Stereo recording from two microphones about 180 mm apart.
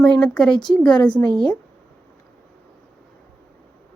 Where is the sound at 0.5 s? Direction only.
25° left (ahead or behind).